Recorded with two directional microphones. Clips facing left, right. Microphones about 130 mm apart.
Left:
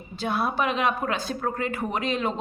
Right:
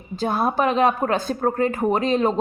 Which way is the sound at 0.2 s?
45° right (ahead or behind).